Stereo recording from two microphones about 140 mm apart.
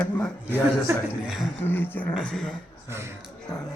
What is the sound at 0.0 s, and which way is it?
Speech, 10° left (ahead or behind).